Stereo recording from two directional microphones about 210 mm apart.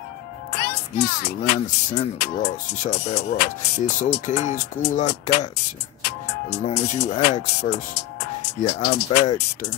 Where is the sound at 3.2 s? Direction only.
50° left (ahead or behind).